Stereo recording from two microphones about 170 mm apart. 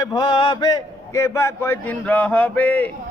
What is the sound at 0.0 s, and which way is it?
A man's voice, 20° left (ahead or behind).